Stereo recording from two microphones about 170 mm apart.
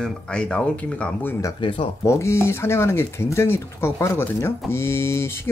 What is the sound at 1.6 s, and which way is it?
Speech, 30° left (ahead or behind).